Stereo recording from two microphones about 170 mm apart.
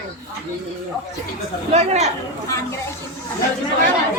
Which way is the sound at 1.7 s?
40° right (ahead or behind).